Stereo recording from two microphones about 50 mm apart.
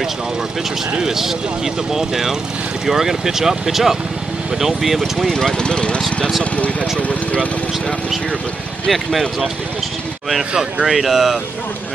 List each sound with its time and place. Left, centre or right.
1.0 s speech: centre
5.3 s speech: centre
5.9 s speech: centre
6.5 s speech: left
8.8 s speech: centre
10.5 s speech: centre
10.9 s speech: centre